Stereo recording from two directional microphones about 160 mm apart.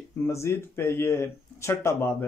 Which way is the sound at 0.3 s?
15° left (ahead or behind).